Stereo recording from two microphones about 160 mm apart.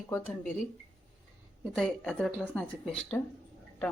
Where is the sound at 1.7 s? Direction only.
5° left (ahead or behind).